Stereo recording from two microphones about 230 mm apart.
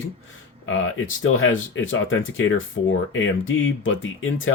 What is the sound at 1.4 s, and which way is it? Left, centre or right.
Speech, left.